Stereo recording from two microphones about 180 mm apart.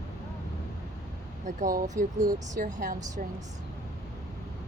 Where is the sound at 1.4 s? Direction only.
45° right (ahead or behind).